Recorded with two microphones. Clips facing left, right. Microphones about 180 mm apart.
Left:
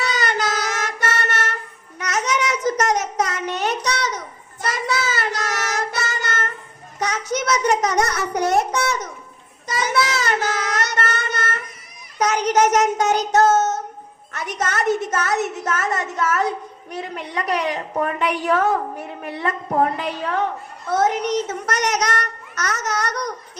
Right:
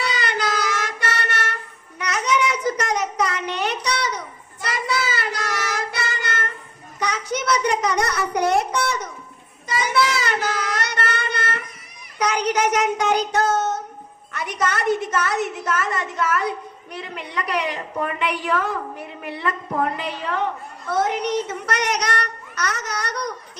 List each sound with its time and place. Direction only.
0.0 s child singing: 45° left (ahead or behind)
14.6 s a woman's voice: 45° left (ahead or behind)